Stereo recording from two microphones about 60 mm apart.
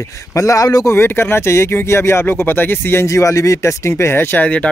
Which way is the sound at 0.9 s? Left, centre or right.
Left.